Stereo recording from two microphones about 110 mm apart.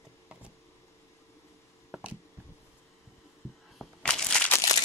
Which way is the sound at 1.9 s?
10° right (ahead or behind).